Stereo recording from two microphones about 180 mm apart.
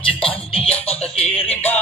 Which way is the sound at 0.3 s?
30° left (ahead or behind).